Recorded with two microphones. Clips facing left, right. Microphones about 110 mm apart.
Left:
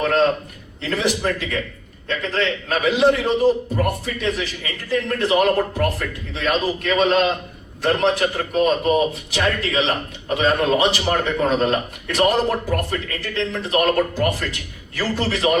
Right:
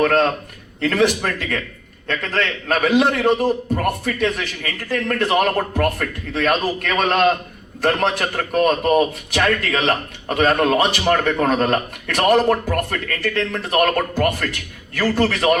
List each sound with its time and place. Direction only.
0.0 s a man's voice: 55° right (ahead or behind)